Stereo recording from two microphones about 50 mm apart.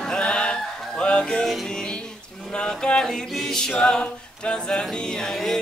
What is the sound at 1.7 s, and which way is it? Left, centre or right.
A capella, centre.